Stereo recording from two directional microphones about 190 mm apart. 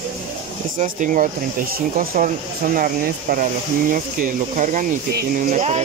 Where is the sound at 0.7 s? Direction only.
45° right (ahead or behind).